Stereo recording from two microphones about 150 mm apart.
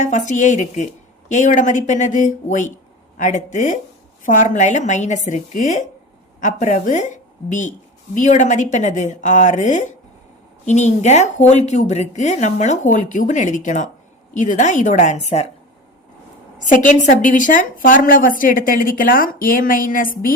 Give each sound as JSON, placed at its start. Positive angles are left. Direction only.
{"t": 0.0, "sound": "a woman's voice", "side_deg": 55}
{"t": 16.6, "sound": "a woman's voice", "side_deg": 60}